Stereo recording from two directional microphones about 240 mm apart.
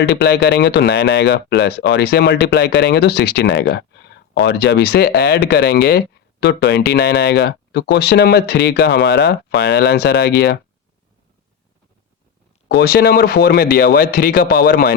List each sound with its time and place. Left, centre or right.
0.0 s speech: left
12.6 s speech: left